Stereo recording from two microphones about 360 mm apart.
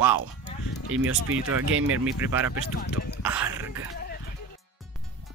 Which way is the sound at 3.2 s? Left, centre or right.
Centre.